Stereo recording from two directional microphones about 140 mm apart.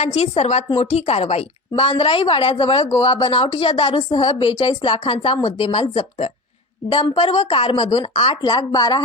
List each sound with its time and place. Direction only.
0.0 s a woman's voice: 50° left (ahead or behind); by 9.0 s 30° left (ahead or behind)